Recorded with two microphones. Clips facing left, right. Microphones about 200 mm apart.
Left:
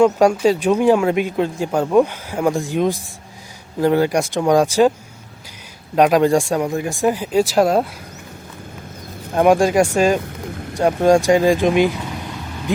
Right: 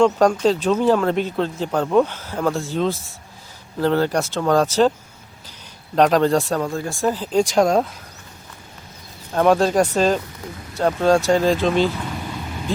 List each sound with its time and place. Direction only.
0.0 s speech: 10° left (ahead or behind)
6.0 s speech: 10° left (ahead or behind)
9.3 s speech: 10° left (ahead or behind)
10.5 s vehicle: 60° left (ahead or behind)
10.8 s speech: 15° left (ahead or behind)